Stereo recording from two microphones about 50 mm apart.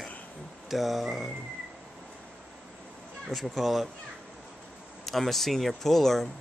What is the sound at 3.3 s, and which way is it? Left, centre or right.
Speech, centre.